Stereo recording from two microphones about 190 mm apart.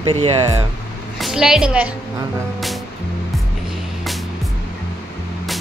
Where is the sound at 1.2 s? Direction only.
5° right (ahead or behind).